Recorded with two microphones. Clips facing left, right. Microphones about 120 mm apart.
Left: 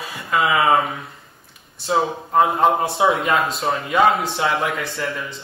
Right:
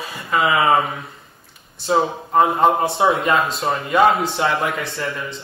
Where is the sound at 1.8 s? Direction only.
Centre (ahead or behind).